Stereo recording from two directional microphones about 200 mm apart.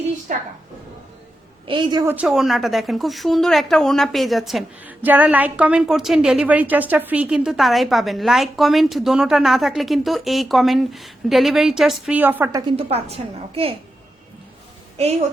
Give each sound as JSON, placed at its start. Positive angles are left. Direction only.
{"t": 0.3, "sound": "a woman's voice", "side_deg": -45}
{"t": 1.6, "sound": "a woman's voice", "side_deg": -25}
{"t": 2.1, "sound": "speech", "side_deg": 0}
{"t": 12.7, "sound": "a woman's voice", "side_deg": -30}